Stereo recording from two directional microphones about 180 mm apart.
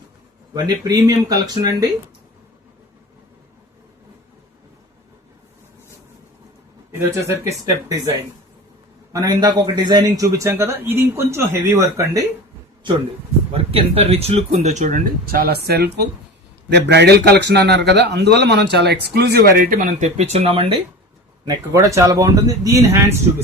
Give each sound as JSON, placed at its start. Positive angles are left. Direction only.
{"t": 0.5, "sound": "a man's voice", "side_deg": -20}
{"t": 7.0, "sound": "a man's voice", "side_deg": -15}
{"t": 9.1, "sound": "a man's voice", "side_deg": -20}
{"t": 13.5, "sound": "a man's voice", "side_deg": -30}
{"t": 21.4, "sound": "a man's voice", "side_deg": -20}